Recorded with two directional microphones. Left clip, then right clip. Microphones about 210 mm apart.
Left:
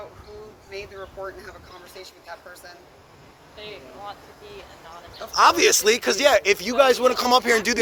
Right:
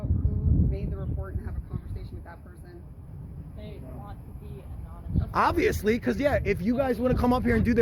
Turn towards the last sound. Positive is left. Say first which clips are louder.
# left 7 dB
turn(degrees=15)  # may be behind; listen again after turning